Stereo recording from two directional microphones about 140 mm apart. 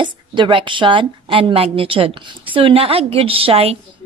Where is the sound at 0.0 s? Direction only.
35° right (ahead or behind).